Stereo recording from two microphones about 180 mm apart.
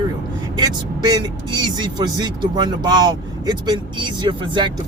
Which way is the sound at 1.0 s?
25° right (ahead or behind).